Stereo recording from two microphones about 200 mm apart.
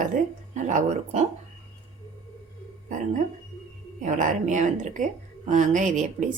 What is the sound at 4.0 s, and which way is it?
A woman's voice, 40° right (ahead or behind).